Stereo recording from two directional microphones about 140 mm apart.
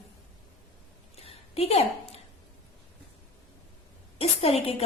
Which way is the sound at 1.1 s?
45° left (ahead or behind).